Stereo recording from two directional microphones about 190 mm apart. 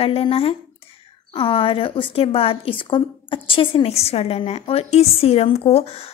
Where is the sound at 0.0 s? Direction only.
30° left (ahead or behind).